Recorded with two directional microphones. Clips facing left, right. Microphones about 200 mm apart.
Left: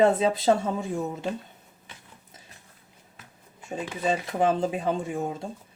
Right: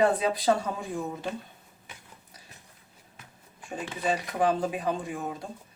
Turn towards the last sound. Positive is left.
turn(degrees=25)  # may be behind; listen again after turning